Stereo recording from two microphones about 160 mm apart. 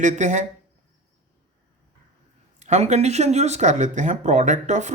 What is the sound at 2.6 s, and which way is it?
Speech, 45° right (ahead or behind).